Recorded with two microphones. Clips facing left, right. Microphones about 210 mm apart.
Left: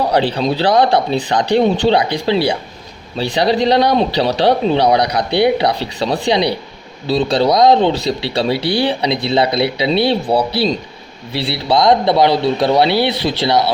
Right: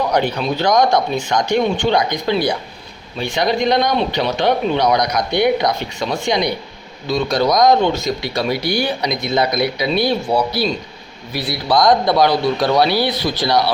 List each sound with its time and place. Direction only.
0.3 s speech: 35° left (ahead or behind)